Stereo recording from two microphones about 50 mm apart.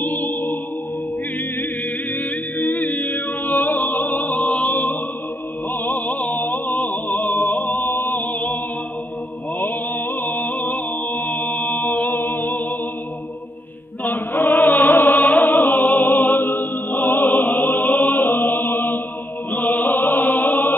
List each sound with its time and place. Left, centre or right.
0.0 s music: left
2.1 s a capella: left
5.7 s music: left
7.8 s music: left
9.6 s music: left
14.0 s music: left
19.5 s chant: left